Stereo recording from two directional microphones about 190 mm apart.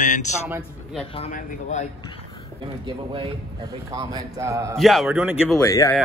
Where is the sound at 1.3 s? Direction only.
40° left (ahead or behind).